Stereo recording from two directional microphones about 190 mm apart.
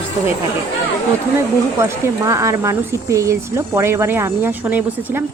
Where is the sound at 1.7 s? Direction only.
15° right (ahead or behind).